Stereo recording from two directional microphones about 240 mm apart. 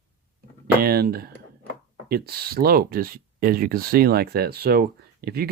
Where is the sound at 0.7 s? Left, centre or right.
Right.